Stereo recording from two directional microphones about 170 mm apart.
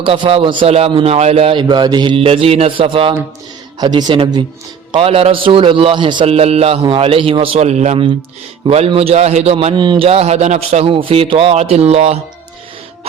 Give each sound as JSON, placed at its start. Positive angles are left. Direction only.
{"t": 0.0, "sound": "a man's voice", "side_deg": -30}